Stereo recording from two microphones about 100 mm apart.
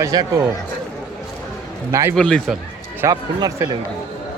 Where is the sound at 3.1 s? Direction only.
40° right (ahead or behind).